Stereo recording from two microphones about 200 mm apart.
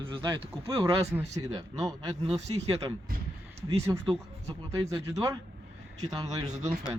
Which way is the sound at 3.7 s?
15° right (ahead or behind).